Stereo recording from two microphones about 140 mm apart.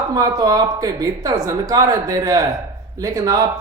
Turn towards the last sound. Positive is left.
turn(degrees=-25)  # may be behind; listen again after turning